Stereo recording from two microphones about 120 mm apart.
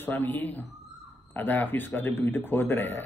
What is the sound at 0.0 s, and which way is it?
A man's voice, 15° left (ahead or behind).